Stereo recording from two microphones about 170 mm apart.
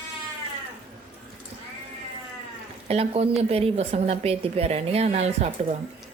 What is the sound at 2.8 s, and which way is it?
A woman's voice, 35° right (ahead or behind).